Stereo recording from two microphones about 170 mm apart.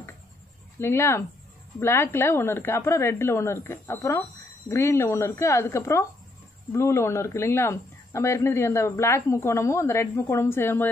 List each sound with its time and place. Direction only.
0.7 s speech: 15° left (ahead or behind)